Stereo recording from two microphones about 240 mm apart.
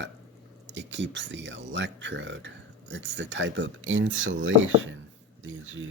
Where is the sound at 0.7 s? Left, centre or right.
Right.